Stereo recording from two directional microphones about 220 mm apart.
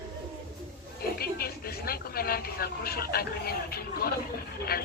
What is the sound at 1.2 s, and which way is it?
Speech, 45° left (ahead or behind).